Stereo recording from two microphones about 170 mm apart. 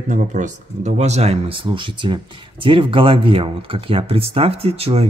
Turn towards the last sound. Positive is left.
turn(degrees=-35)  # may be behind; listen again after turning